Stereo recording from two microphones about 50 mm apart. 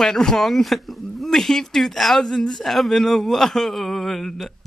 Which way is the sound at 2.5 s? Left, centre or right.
Centre.